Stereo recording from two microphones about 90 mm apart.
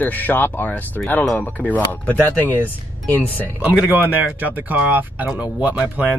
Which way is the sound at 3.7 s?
15° right (ahead or behind).